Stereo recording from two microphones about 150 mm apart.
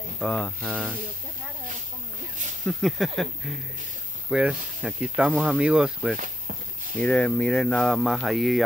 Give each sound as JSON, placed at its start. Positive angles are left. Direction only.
{"t": 0.2, "sound": "speech", "side_deg": 5}
{"t": 2.6, "sound": "speech", "side_deg": 0}
{"t": 6.1, "sound": "a sound", "side_deg": -60}
{"t": 7.0, "sound": "speech", "side_deg": 10}